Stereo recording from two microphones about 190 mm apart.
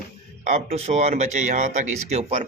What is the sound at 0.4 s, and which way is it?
Speech, 35° right (ahead or behind).